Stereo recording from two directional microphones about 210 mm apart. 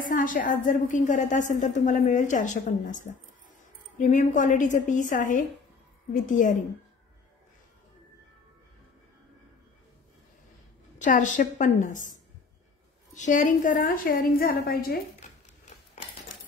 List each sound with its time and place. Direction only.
0.0 s a woman's voice: 40° left (ahead or behind)
11.0 s a woman's voice: 35° left (ahead or behind)